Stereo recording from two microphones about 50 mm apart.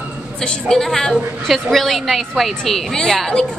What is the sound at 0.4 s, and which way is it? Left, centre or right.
A woman's voice, centre.